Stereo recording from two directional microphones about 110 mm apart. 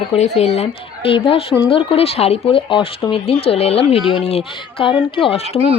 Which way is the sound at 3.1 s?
60° left (ahead or behind).